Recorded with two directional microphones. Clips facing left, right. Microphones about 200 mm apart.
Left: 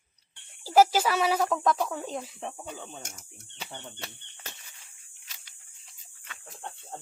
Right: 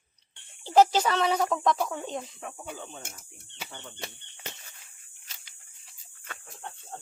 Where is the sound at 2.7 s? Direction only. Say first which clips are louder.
Right 1 dB; 20° left (ahead or behind).